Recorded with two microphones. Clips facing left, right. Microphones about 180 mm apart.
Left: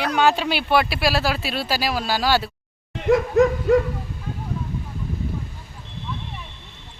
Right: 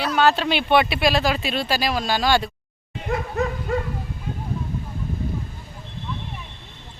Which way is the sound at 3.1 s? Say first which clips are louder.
Left 9 dB; 90° left.